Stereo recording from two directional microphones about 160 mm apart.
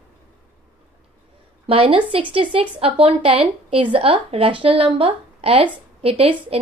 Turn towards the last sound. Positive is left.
turn(degrees=-35)  # may be behind; listen again after turning